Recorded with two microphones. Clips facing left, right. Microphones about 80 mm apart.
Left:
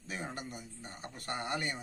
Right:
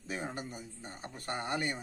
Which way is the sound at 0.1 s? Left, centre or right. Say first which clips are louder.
Right 2 dB; right.